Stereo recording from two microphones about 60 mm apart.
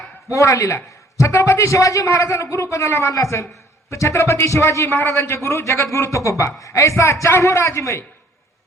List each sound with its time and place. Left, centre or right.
0.3 s a man's voice: left